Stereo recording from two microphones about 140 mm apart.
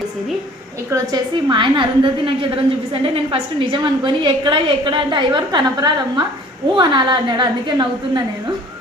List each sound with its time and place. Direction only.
0.9 s a woman's voice: 20° right (ahead or behind)
1.5 s a woman's voice: 35° right (ahead or behind)